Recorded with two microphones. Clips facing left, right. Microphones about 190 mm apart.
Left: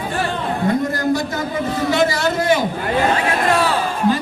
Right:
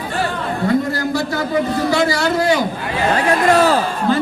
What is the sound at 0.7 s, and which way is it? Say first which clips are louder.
A man's voice: even; 20° left (ahead or behind).